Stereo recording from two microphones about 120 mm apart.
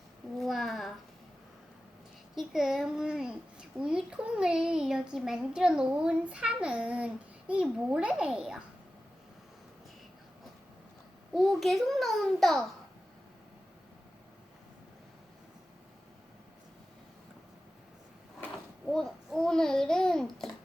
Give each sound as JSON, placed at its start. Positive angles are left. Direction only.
{"t": 0.3, "sound": "a sound", "side_deg": 0}
{"t": 2.3, "sound": "a child's voice", "side_deg": -5}
{"t": 11.3, "sound": "a child's voice", "side_deg": 0}
{"t": 18.9, "sound": "a child's voice", "side_deg": 5}